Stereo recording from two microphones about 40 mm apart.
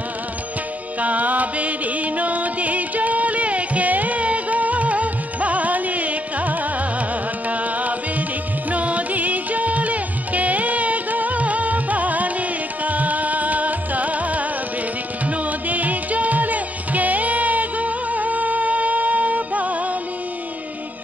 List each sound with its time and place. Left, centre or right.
1.0 s music: right